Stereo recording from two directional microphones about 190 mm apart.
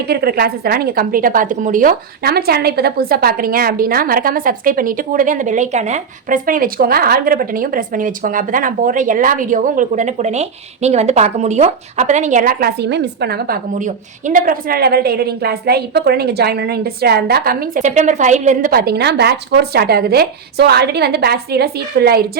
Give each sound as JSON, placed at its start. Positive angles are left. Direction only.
{"t": 0.1, "sound": "a woman's voice", "side_deg": -55}
{"t": 13.7, "sound": "a woman's voice", "side_deg": -40}